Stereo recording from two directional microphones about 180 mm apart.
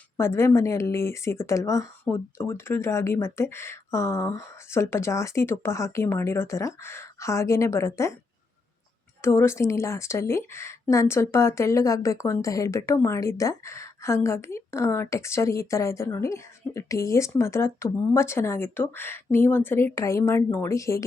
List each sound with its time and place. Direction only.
0.2 s speech: 15° left (ahead or behind)
9.2 s speech: 15° left (ahead or behind)